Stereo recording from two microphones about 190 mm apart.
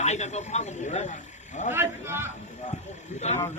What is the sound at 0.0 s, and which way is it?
Speech, 35° left (ahead or behind).